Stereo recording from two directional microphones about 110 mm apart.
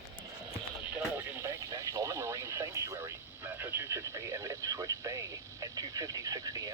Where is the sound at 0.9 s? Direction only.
20° right (ahead or behind); by 6.7 s 35° right (ahead or behind).